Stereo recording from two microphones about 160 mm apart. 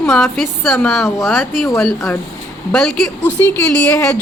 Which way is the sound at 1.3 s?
Centre (ahead or behind).